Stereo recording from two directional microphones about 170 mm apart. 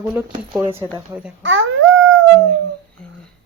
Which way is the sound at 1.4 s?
90° right.